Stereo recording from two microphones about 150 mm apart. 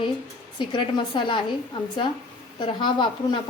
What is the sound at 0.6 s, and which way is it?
Speech, 30° left (ahead or behind).